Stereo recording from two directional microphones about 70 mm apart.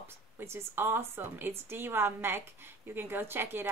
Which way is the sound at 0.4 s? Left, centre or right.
Right.